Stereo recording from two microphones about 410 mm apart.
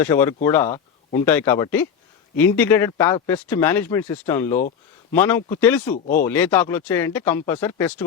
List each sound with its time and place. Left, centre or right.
0.0 s speech: centre
5.9 s speech: centre
6.2 s speech: centre